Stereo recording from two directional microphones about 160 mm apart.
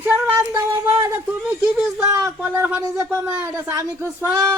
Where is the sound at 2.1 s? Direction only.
20° right (ahead or behind).